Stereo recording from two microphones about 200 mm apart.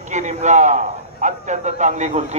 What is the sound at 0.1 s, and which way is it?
A man's voice, 35° right (ahead or behind).